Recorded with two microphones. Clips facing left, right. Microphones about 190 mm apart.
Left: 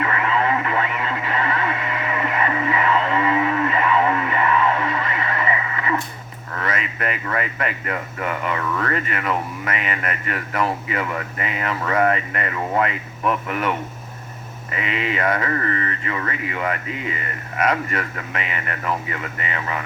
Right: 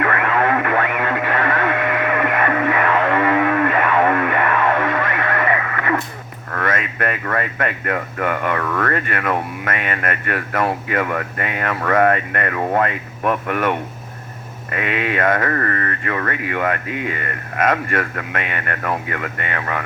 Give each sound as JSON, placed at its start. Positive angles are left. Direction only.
{"t": 0.0, "sound": "radio", "side_deg": -60}
{"t": 6.5, "sound": "speech", "side_deg": -50}